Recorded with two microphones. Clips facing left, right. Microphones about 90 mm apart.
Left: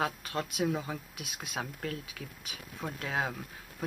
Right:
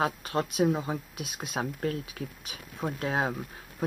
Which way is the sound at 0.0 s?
30° right (ahead or behind).